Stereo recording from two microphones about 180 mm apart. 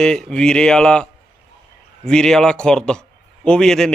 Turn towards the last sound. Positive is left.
turn(degrees=5)  # may be behind; listen again after turning